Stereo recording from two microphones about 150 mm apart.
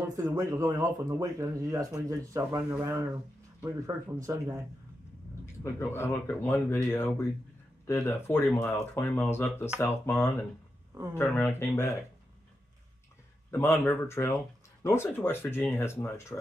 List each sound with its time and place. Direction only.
0.1 s speech: 20° right (ahead or behind)
5.4 s speech: 15° left (ahead or behind)
13.5 s speech: 15° left (ahead or behind)